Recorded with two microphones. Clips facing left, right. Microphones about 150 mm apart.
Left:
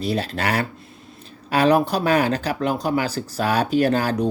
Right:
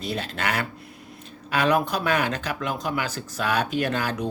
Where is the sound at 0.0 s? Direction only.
35° left (ahead or behind).